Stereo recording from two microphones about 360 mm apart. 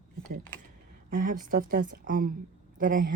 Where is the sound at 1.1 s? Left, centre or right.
Right.